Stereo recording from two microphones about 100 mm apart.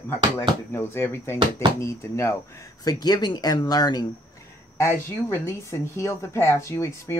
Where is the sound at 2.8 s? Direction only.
40° left (ahead or behind).